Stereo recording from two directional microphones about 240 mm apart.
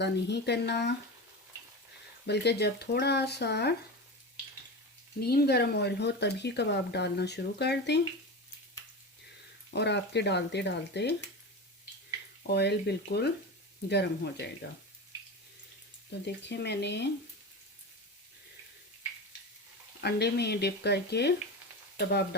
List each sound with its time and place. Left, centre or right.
0.0 s speech: left
2.2 s speech: left
5.2 s speech: left
9.7 s speech: left
12.4 s speech: left
16.2 s speech: left
20.0 s speech: left